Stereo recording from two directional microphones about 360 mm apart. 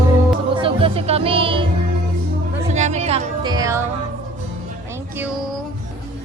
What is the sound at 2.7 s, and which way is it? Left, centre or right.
Speech, centre.